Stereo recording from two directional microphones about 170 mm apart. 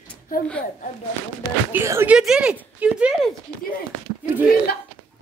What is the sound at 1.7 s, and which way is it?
Speech, 15° right (ahead or behind).